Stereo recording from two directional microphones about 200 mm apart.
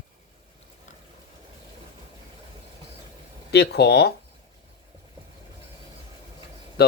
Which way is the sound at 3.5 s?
55° left (ahead or behind).